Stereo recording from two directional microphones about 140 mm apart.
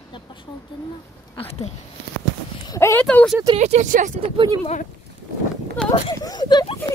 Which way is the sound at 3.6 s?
55° right (ahead or behind).